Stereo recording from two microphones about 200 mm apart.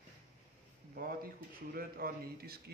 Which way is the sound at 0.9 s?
50° right (ahead or behind).